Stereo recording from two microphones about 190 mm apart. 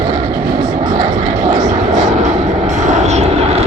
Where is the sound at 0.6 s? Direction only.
20° right (ahead or behind).